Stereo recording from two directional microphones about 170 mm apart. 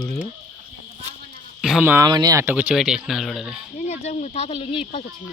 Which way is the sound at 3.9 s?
40° left (ahead or behind).